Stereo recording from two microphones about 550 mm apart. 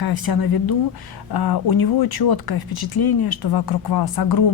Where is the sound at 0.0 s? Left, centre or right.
Left.